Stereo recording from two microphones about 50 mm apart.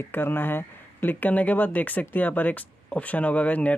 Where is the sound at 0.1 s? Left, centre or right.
Left.